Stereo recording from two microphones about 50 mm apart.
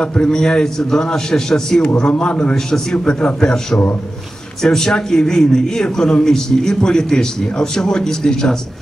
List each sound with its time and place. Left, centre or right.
0.0 s a man's voice: left
4.6 s a man's voice: centre